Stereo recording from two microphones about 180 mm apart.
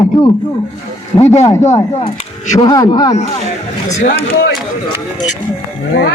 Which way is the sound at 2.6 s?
20° left (ahead or behind).